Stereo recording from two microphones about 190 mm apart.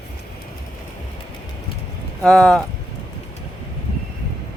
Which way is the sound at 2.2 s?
5° left (ahead or behind).